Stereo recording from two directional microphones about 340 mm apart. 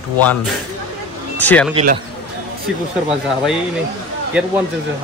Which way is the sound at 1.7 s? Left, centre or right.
Centre.